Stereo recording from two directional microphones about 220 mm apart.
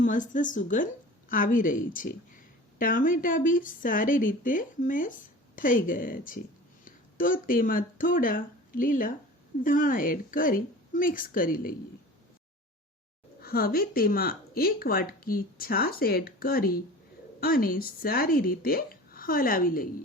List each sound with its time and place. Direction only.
0.0 s speech: 35° left (ahead or behind)
13.4 s speech: 45° left (ahead or behind)